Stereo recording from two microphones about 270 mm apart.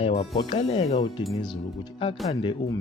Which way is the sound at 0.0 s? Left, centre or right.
Left.